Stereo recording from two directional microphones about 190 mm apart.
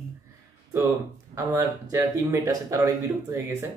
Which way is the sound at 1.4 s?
15° right (ahead or behind).